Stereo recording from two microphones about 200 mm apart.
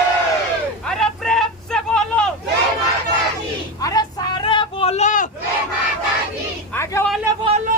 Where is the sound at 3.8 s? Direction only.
20° left (ahead or behind); by 5.3 s 40° left (ahead or behind).